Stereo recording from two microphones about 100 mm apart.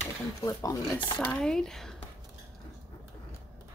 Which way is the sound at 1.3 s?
5° left (ahead or behind).